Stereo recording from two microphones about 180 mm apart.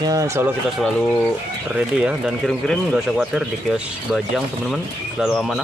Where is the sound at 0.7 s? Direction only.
Centre (ahead or behind).